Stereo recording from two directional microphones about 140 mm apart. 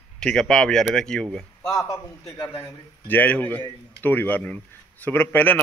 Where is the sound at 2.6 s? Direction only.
15° left (ahead or behind).